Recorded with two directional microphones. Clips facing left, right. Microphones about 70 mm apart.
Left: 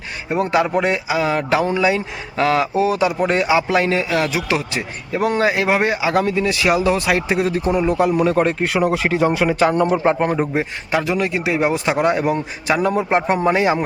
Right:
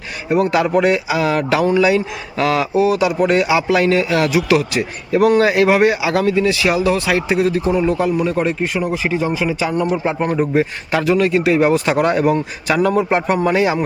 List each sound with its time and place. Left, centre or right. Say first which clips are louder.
0.3 s speech: right 3 dB; left
8.1 s speech: left 1 dB; left
8.6 s speech: left 2 dB; left
10.3 s speech: right 4 dB; centre